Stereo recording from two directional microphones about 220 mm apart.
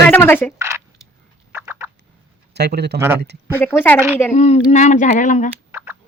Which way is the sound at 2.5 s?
50° right (ahead or behind).